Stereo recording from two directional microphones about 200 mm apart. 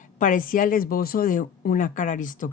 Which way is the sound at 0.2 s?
40° left (ahead or behind).